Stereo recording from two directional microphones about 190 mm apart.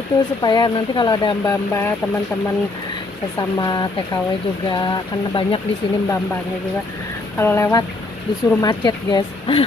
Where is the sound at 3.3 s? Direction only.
20° left (ahead or behind).